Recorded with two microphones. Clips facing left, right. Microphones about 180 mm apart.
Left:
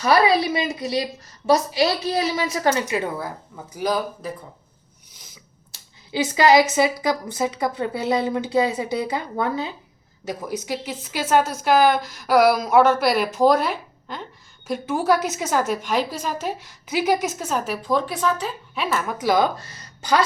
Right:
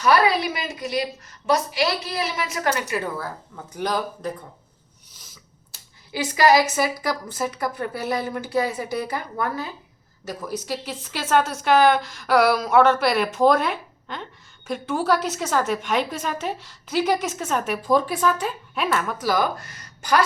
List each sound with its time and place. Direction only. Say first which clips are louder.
0.0 s a woman's voice: left 1 dB; 30° left (ahead or behind)
2.8 s a woman's voice: left 2 dB; 15° left (ahead or behind)
5.1 s a sound: left 1 dB; 15° left (ahead or behind)
6.1 s a woman's voice: left 1 dB; 20° left (ahead or behind); by 19.1 s 5° left (ahead or behind)
19.2 s speech: left 7 dB; 20° left (ahead or behind)